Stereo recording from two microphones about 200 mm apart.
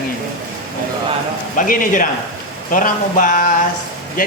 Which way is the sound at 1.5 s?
45° left (ahead or behind).